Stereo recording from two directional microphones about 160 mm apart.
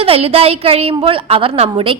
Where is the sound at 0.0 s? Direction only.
40° right (ahead or behind).